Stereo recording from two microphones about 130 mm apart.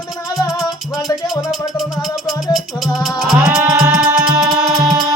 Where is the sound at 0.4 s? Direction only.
25° left (ahead or behind).